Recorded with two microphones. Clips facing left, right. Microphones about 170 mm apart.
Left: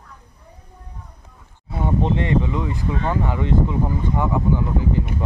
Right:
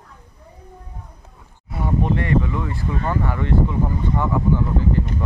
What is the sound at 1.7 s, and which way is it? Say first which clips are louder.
Speech: left 1 dB; 25° left (ahead or behind).